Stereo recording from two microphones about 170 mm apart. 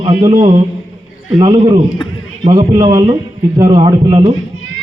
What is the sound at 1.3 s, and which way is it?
A man's voice, 30° right (ahead or behind).